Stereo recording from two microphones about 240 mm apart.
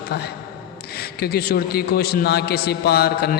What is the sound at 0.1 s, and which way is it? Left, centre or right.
A man's voice, left.